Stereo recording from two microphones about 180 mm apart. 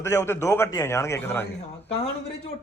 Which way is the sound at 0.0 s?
15° left (ahead or behind).